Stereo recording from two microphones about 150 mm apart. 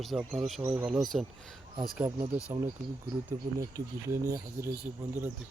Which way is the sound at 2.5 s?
15° right (ahead or behind).